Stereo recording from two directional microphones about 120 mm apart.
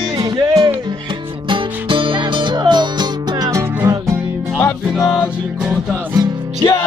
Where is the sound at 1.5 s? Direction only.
45° right (ahead or behind).